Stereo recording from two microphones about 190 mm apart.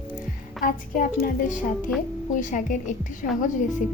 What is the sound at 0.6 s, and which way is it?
A woman's voice, 45° left (ahead or behind).